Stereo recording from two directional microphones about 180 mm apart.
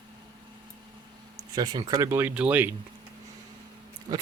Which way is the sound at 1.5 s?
25° right (ahead or behind).